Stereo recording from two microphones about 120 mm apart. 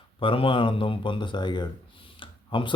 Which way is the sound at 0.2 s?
45° left (ahead or behind).